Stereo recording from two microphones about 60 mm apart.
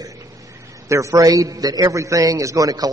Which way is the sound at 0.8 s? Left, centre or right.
Right.